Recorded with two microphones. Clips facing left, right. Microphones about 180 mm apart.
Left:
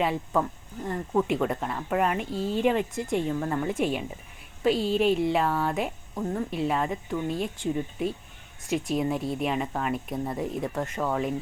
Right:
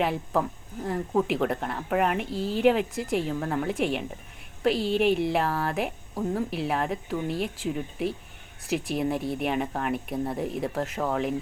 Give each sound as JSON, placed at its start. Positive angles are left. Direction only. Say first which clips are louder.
{"t": 0.0, "sound": "speech", "louder": "even", "side_deg": 0}
{"t": 2.3, "sound": "speech", "louder": "left 1 dB", "side_deg": 25}
{"t": 2.6, "sound": "speech", "louder": "right 3 dB", "side_deg": -5}